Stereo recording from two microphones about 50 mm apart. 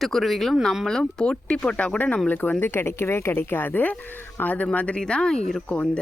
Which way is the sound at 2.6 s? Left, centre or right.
Left.